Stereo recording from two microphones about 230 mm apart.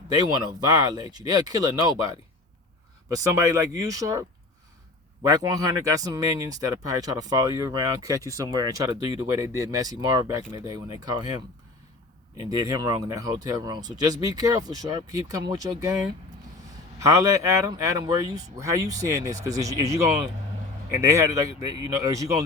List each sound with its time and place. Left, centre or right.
0.1 s speech: centre
3.2 s speech: centre
5.3 s speech: centre
17.0 s speech: centre